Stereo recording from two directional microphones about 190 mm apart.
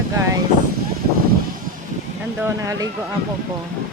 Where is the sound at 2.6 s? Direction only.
20° right (ahead or behind).